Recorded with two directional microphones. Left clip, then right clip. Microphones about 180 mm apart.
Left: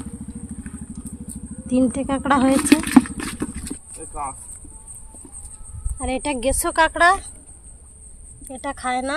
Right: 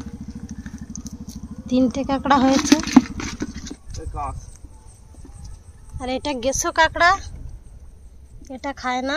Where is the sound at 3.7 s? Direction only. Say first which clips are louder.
Left 1 dB; 35° left (ahead or behind).